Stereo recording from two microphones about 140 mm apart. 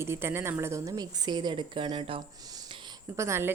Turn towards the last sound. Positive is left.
turn(degrees=-20)  # may be behind; listen again after turning